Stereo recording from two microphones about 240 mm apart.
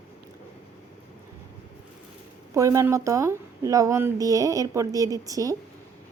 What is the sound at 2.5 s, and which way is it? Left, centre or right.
A woman's voice, centre.